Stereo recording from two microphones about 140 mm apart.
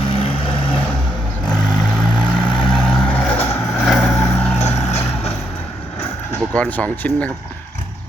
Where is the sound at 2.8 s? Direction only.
5° left (ahead or behind).